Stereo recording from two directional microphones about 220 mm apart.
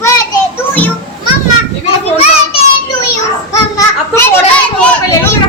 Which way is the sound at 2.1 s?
25° left (ahead or behind).